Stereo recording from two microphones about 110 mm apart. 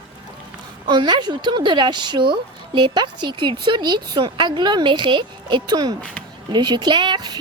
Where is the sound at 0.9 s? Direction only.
45° right (ahead or behind).